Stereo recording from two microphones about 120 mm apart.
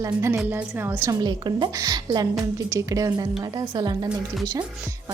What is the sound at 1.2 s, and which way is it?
A woman's voice, 40° right (ahead or behind).